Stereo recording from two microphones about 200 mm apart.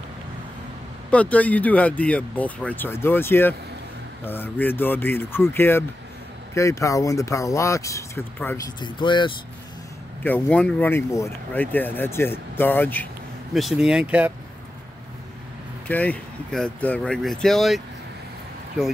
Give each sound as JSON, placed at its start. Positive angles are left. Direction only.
{"t": 1.1, "sound": "speech", "side_deg": 5}
{"t": 10.2, "sound": "speech", "side_deg": 5}
{"t": 15.9, "sound": "speech", "side_deg": 10}